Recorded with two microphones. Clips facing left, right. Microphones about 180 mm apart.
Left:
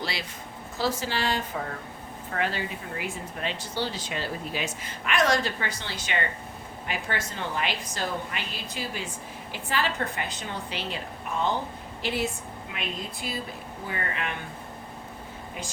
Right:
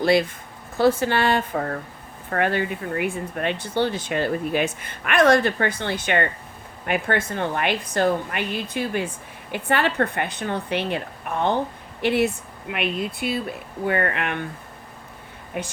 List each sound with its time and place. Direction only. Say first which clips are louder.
0.0 s speech: right 15 dB; 50° right (ahead or behind)
15.6 s speech: right 9 dB; 60° right (ahead or behind)